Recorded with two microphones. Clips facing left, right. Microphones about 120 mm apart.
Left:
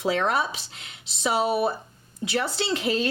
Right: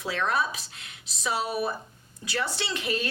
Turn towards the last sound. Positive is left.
turn(degrees=30)  # may be behind; listen again after turning